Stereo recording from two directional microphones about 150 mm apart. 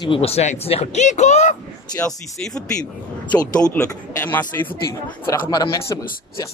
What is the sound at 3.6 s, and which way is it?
Speech, 10° left (ahead or behind).